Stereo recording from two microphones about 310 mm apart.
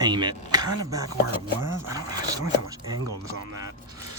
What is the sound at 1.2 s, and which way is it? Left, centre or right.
Speech, right.